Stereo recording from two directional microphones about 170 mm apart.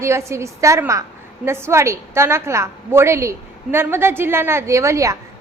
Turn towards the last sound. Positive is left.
turn(degrees=-20)  # may be behind; listen again after turning